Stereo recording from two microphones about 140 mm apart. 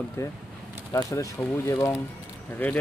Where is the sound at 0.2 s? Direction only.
20° left (ahead or behind).